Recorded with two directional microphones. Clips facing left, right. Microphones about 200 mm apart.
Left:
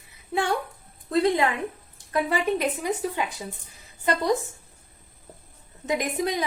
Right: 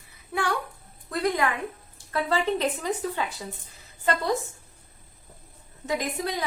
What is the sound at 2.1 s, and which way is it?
A woman's voice, 15° left (ahead or behind).